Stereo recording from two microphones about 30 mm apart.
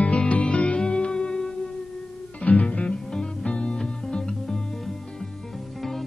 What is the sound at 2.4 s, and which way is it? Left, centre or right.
Music, left.